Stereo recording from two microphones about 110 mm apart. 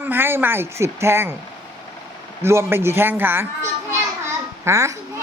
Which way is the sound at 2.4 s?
20° right (ahead or behind).